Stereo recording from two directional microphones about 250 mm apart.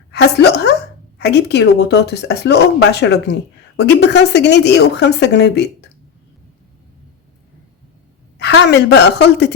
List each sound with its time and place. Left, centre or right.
0.1 s a woman's voice: left
8.4 s speech: left